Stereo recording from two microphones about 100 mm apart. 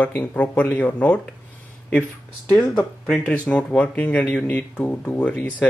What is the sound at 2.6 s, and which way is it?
Speech, centre (ahead or behind).